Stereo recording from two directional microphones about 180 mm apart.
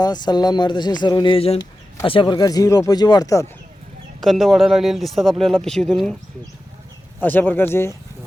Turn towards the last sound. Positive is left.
turn(degrees=15)  # may be behind; listen again after turning